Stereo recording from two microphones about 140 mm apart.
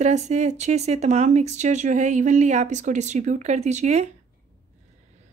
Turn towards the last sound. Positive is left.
turn(degrees=-50)  # may be behind; listen again after turning